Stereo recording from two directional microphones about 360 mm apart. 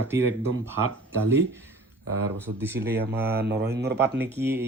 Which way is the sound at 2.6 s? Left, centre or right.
Centre.